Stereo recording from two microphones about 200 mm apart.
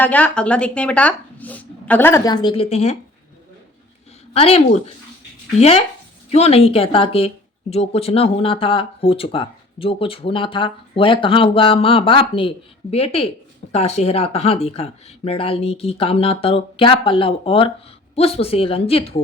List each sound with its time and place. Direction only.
0.0 s speech: 5° left (ahead or behind); by 3.0 s 30° left (ahead or behind)
4.4 s speech: 30° left (ahead or behind)